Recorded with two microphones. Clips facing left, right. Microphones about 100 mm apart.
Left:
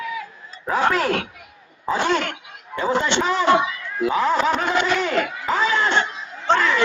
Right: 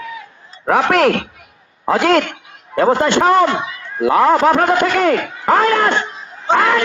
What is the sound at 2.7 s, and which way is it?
Speech, 55° right (ahead or behind).